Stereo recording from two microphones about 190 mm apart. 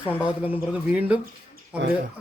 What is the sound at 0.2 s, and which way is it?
Speech, 10° right (ahead or behind).